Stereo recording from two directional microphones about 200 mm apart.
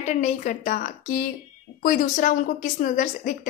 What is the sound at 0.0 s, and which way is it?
A woman's voice, 35° left (ahead or behind).